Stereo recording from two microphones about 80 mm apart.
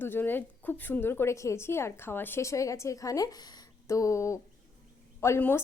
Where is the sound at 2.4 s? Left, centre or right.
Left.